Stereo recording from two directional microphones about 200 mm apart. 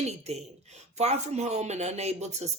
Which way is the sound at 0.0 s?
35° right (ahead or behind).